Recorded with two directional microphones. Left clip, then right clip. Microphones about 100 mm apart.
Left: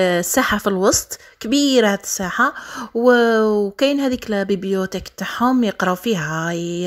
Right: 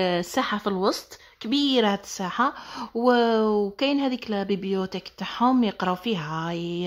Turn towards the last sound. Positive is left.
turn(degrees=30)  # may be behind; listen again after turning